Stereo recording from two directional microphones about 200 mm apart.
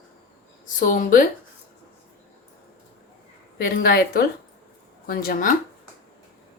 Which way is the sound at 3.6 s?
45° left (ahead or behind).